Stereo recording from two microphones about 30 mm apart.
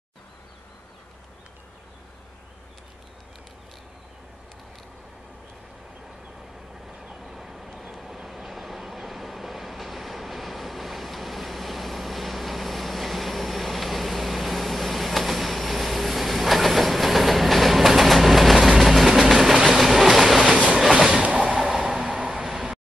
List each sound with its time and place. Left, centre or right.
7.0 s vehicle: centre
19.8 s train: centre
21.1 s vehicle: right
21.5 s a sound: centre
22.0 s vehicle: right
22.3 s vehicle: centre